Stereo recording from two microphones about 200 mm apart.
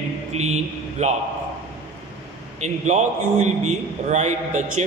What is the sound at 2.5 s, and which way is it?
A man's voice, 35° right (ahead or behind).